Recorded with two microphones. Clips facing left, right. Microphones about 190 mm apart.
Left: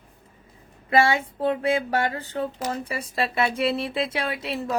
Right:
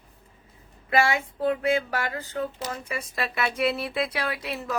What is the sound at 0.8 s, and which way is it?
A woman's voice, 30° left (ahead or behind).